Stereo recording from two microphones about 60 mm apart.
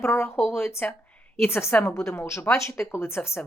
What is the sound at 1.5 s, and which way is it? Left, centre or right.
A woman's voice, left.